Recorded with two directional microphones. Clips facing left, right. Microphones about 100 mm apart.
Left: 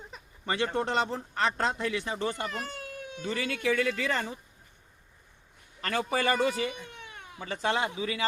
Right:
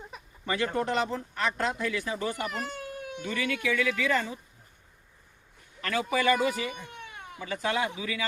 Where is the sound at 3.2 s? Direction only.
30° left (ahead or behind).